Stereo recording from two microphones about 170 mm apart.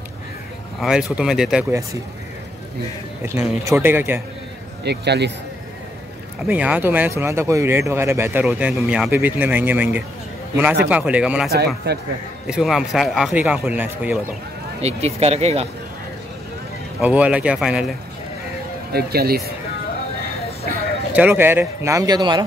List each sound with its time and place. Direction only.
0.7 s a man's voice: centre (ahead or behind)
3.6 s speech: 15° right (ahead or behind)
4.8 s speech: 80° right
6.4 s a man's voice: 10° right (ahead or behind)
11.5 s speech: 70° right (ahead or behind)
12.4 s a man's voice: 5° right (ahead or behind)
14.8 s speech: 40° right (ahead or behind)
17.0 s speech: 10° right (ahead or behind)
18.9 s speech: 65° right (ahead or behind)
21.1 s speech: 10° right (ahead or behind)